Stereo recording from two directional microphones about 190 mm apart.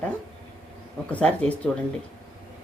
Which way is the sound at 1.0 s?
5° left (ahead or behind).